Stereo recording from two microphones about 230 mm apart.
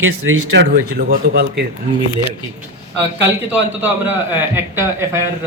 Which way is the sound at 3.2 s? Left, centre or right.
Centre.